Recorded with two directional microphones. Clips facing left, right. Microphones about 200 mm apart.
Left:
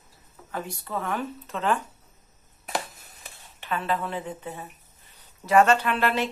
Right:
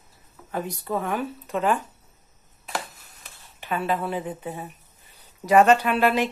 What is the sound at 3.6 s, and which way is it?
Speech, 10° right (ahead or behind).